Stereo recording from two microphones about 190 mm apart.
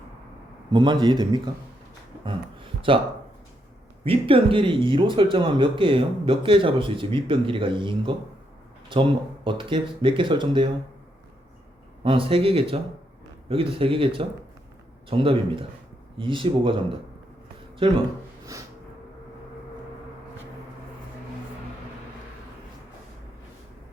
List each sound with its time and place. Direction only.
0.7 s speech: 25° right (ahead or behind)
4.0 s speech: 30° right (ahead or behind)
12.0 s speech: 30° right (ahead or behind)
18.5 s speech: 20° right (ahead or behind)